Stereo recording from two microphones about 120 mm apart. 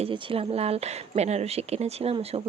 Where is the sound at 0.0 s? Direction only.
50° right (ahead or behind).